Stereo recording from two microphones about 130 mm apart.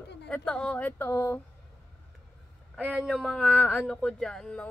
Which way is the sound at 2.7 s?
5° left (ahead or behind).